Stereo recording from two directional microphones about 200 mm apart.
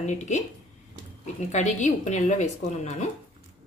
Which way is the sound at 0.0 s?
35° left (ahead or behind).